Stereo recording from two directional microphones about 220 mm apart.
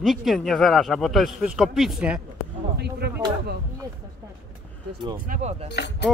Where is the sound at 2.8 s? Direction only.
50° right (ahead or behind).